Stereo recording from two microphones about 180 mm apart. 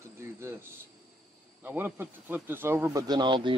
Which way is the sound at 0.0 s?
15° right (ahead or behind).